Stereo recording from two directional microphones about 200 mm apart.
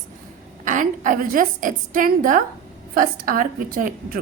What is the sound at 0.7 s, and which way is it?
A woman's voice, 40° right (ahead or behind).